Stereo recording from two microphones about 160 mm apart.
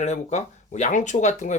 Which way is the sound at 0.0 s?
45° left (ahead or behind).